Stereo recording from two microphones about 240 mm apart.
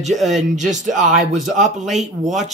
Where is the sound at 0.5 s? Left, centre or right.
Right.